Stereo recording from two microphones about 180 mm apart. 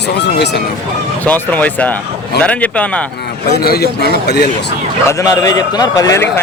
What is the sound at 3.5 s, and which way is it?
A man's voice, 60° left (ahead or behind).